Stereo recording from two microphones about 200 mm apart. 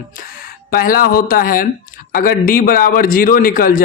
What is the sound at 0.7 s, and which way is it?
A man's voice, 45° left (ahead or behind).